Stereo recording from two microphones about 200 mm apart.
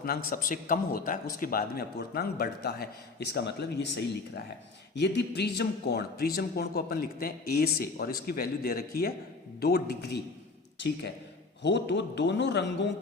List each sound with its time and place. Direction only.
0.3 s speech: 45° left (ahead or behind); by 12.9 s 60° left (ahead or behind)